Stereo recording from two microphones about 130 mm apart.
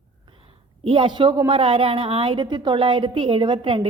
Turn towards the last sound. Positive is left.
turn(degrees=-40)  # may be behind; listen again after turning